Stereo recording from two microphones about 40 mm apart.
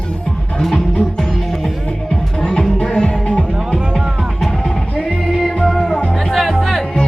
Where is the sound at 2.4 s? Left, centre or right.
Left.